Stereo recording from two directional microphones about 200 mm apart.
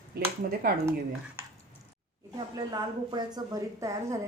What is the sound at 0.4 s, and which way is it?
Speech, 45° right (ahead or behind).